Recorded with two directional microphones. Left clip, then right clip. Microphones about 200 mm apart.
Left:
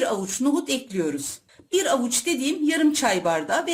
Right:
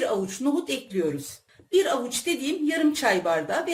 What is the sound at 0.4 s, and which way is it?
Speech, 50° left (ahead or behind).